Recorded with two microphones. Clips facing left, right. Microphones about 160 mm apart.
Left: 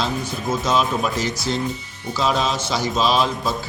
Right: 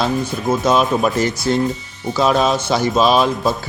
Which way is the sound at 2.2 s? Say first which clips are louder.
Right 6 dB; 55° right (ahead or behind).